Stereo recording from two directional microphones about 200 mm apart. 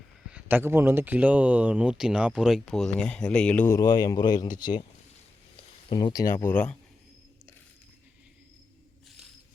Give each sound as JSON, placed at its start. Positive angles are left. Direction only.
{"t": 0.3, "sound": "speech", "side_deg": -5}
{"t": 5.9, "sound": "speech", "side_deg": 20}
{"t": 6.3, "sound": "speech", "side_deg": 10}